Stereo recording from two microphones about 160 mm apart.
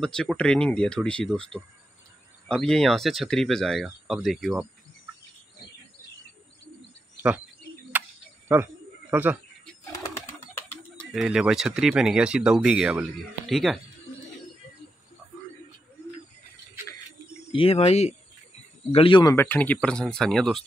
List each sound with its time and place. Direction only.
0.0 s speech: 5° left (ahead or behind)
7.2 s speech: 10° right (ahead or behind)
8.0 s a sound: 10° right (ahead or behind)
8.5 s speech: 10° right (ahead or behind)
11.1 s speech: 5° right (ahead or behind)
17.4 s speech: 35° left (ahead or behind)
19.3 s speech: 10° left (ahead or behind)